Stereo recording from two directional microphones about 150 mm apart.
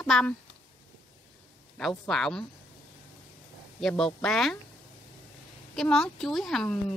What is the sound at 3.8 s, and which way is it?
Speech, 5° left (ahead or behind).